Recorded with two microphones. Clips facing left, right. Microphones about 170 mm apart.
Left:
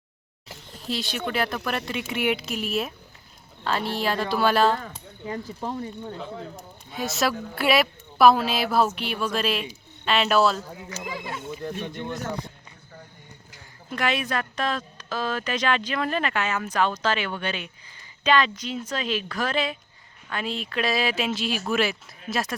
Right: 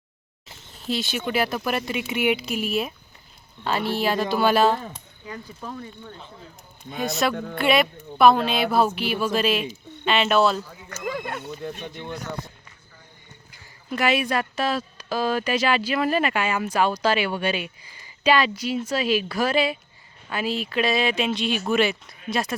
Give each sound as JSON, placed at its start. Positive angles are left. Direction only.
{"t": 0.9, "sound": "speech", "side_deg": 0}
{"t": 5.2, "sound": "speech", "side_deg": 30}
{"t": 6.1, "sound": "speech", "side_deg": 75}
{"t": 7.0, "sound": "speech", "side_deg": 0}
{"t": 10.8, "sound": "speech", "side_deg": -55}
{"t": 13.9, "sound": "speech", "side_deg": -10}